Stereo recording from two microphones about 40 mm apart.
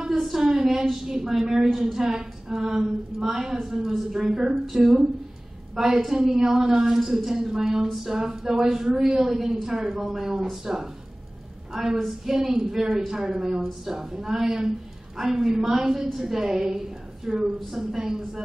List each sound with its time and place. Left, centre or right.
0.2 s a woman's voice: centre